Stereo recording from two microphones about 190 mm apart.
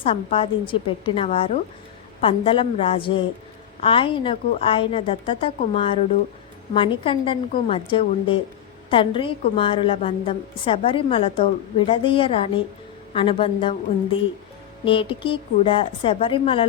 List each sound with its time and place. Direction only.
0.0 s a woman's voice: 30° left (ahead or behind)
14.8 s a woman's voice: 25° left (ahead or behind)